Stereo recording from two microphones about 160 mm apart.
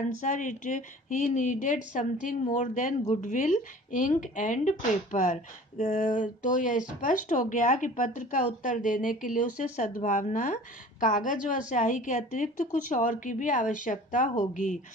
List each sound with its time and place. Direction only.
0.2 s speech: 55° left (ahead or behind)